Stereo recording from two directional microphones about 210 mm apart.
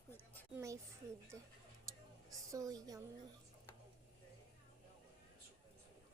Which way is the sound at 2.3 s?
15° right (ahead or behind).